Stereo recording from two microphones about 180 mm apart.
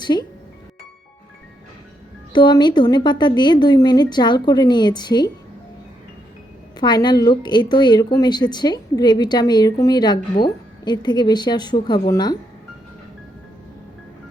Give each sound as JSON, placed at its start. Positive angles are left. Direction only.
{"t": 0.0, "sound": "speech", "side_deg": 25}
{"t": 2.3, "sound": "a woman's voice", "side_deg": 25}
{"t": 6.7, "sound": "a woman's voice", "side_deg": 25}